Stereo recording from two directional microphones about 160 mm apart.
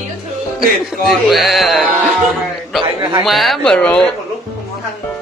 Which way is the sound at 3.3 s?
Centre (ahead or behind).